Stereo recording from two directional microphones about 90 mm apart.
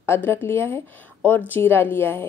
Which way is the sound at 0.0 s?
30° left (ahead or behind).